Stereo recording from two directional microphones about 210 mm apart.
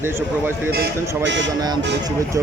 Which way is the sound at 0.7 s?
50° right (ahead or behind).